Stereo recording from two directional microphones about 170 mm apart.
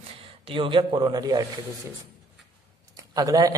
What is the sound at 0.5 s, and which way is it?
Speech, 30° right (ahead or behind).